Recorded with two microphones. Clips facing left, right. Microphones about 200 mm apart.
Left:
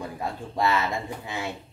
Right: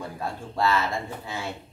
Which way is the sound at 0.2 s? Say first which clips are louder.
Even; 15° left (ahead or behind).